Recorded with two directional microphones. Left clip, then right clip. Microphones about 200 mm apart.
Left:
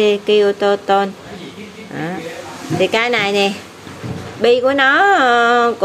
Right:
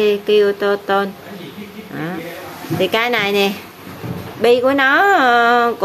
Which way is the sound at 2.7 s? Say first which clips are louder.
Left 1 dB; centre (ahead or behind).